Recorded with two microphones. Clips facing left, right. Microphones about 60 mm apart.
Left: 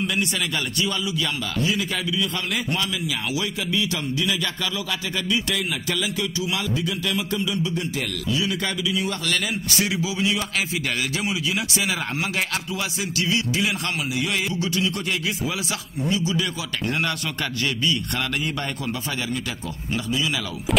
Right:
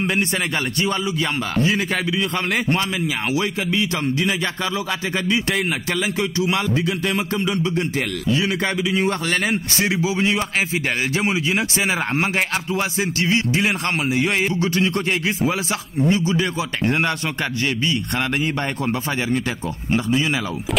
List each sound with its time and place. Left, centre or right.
0.0 s a man's voice: right
18.4 s a man's voice: right